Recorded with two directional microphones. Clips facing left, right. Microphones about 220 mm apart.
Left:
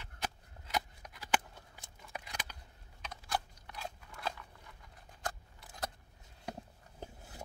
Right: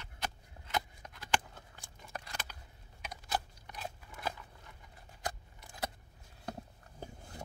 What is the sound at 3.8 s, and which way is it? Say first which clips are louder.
Crunch: right 1 dB; 5° right (ahead or behind).